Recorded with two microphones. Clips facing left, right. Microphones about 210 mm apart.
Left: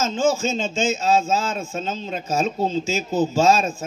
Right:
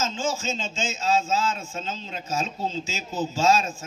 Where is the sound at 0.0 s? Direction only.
55° left (ahead or behind).